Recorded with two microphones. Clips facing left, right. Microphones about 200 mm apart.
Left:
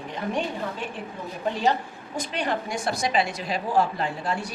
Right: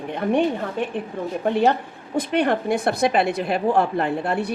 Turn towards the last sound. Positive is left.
turn(degrees=-60)  # may be behind; listen again after turning